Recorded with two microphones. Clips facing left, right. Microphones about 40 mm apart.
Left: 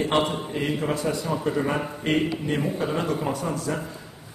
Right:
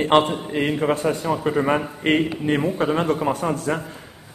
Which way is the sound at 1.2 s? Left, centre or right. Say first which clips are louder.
Right 6 dB; right.